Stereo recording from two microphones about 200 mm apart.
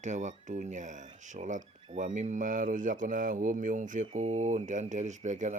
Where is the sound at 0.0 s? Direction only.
35° right (ahead or behind).